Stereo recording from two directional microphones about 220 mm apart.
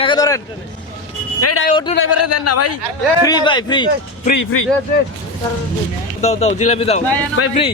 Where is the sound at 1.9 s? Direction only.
80° left.